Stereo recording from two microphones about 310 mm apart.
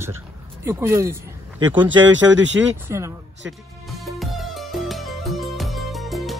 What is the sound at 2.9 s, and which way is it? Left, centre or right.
Speech, centre.